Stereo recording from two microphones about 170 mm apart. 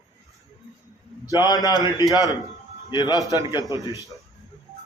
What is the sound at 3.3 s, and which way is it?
Speech, 20° right (ahead or behind).